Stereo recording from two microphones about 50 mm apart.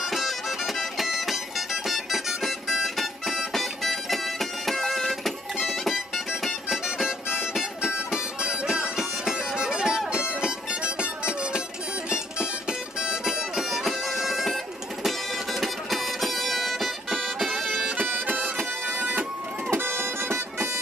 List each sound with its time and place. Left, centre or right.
0.0 s music: centre
7.0 s music: centre
12.6 s music: centre
18.1 s bagpipes: right
19.7 s music: right